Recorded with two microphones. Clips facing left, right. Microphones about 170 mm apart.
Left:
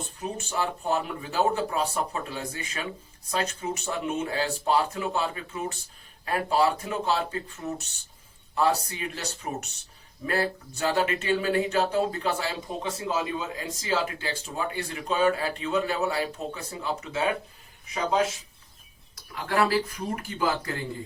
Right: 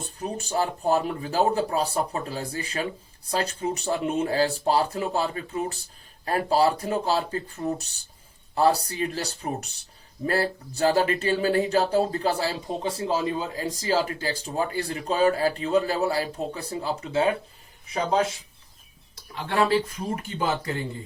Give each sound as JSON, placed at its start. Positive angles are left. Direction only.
{"t": 0.2, "sound": "speech", "side_deg": -35}
{"t": 19.1, "sound": "speech", "side_deg": -25}